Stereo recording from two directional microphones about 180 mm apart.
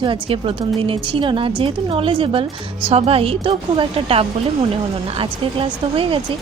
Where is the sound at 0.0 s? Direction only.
30° right (ahead or behind).